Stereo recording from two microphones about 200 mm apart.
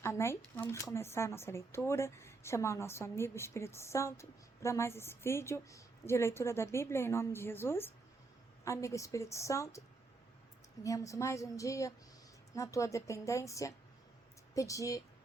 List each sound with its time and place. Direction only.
0.0 s speech: 15° left (ahead or behind)
10.8 s speech: 15° left (ahead or behind)